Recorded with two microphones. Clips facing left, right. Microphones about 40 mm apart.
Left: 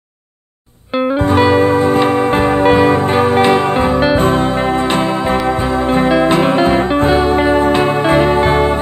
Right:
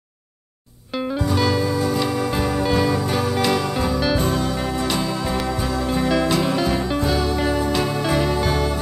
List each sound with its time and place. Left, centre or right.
0.9 s music: left